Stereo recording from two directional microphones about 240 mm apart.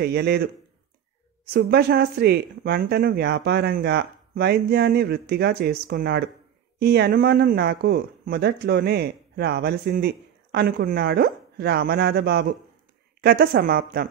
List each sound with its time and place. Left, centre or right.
0.0 s a man's voice: right
1.5 s speech: right